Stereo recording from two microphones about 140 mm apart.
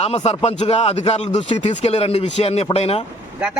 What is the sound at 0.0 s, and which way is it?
Speech, 45° left (ahead or behind).